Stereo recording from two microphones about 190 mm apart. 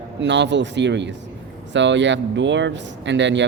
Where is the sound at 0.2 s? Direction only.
70° right (ahead or behind).